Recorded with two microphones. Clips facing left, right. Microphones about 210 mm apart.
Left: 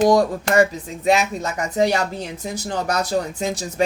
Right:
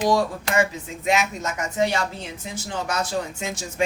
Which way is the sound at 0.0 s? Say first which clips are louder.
Left 5 dB; 45° left (ahead or behind).